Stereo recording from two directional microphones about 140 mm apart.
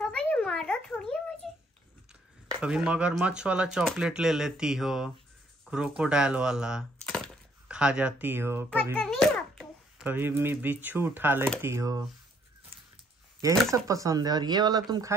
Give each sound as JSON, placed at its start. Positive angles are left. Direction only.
{"t": 0.0, "sound": "a sound", "side_deg": 5}
{"t": 2.6, "sound": "speech", "side_deg": -5}
{"t": 8.9, "sound": "babbling", "side_deg": 5}
{"t": 10.0, "sound": "speech", "side_deg": -15}
{"t": 13.8, "sound": "speech", "side_deg": -25}